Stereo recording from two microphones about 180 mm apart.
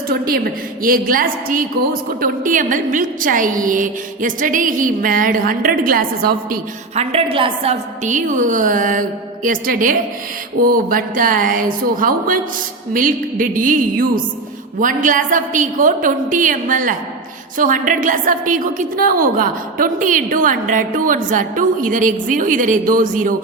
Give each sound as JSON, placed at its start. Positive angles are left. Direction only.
{"t": 0.1, "sound": "a woman's voice", "side_deg": -55}
{"t": 6.9, "sound": "a woman's voice", "side_deg": -35}